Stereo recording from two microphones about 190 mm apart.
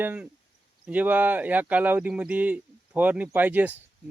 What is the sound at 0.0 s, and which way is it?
Speech, 10° right (ahead or behind).